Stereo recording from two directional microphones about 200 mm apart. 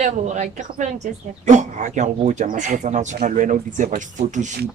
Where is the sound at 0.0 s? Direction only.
35° right (ahead or behind).